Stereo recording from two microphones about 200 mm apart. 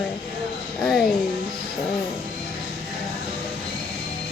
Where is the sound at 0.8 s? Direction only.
Centre (ahead or behind).